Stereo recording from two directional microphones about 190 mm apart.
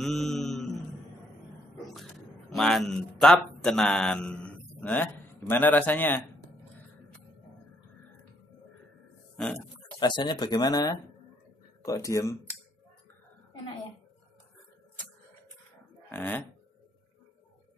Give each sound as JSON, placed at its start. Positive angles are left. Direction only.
{"t": 0.0, "sound": "a sound", "side_deg": 0}
{"t": 2.0, "sound": "a man's voice", "side_deg": 0}
{"t": 9.4, "sound": "pig", "side_deg": 5}
{"t": 9.9, "sound": "speech", "side_deg": 25}
{"t": 16.1, "sound": "speech", "side_deg": 10}